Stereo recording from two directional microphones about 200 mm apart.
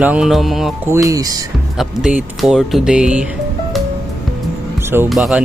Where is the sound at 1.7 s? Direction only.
5° right (ahead or behind).